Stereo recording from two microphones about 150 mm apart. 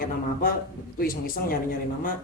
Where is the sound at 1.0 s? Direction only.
80° left.